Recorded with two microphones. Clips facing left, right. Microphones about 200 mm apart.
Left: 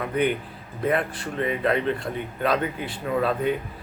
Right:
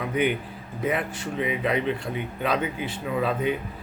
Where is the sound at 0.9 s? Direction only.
5° right (ahead or behind).